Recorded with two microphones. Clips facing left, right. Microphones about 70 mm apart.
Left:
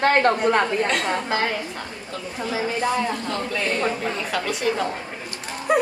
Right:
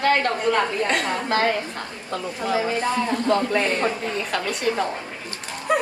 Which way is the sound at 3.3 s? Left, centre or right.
Right.